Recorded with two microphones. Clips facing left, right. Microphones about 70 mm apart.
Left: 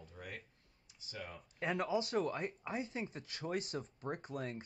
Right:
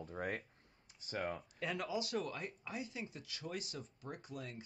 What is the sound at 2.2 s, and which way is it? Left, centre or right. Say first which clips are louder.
Speech: left 5 dB; left.